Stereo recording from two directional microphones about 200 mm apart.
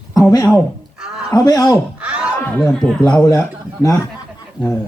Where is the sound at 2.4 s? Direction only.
5° left (ahead or behind).